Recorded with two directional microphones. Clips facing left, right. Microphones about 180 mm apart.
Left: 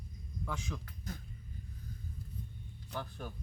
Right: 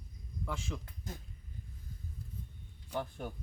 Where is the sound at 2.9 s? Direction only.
20° right (ahead or behind).